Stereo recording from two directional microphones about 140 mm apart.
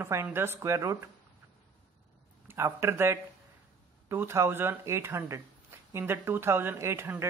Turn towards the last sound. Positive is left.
turn(degrees=-20)  # may be behind; listen again after turning